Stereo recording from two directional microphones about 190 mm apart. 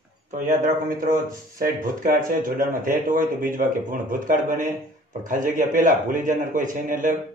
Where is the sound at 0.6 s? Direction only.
45° right (ahead or behind).